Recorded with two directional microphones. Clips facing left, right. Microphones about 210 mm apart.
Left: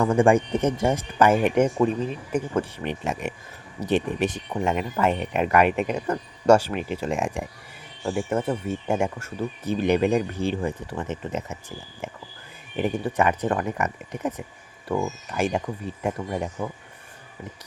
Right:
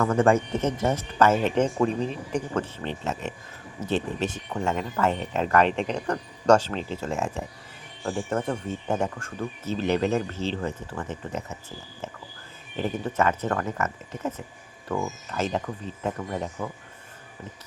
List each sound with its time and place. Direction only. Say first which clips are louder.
0.0 s speech: left 2 dB; 15° left (ahead or behind)
12.7 s speech: left 3 dB; 15° left (ahead or behind)